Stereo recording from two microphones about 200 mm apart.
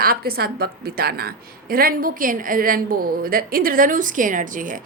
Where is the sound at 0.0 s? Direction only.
50° right (ahead or behind).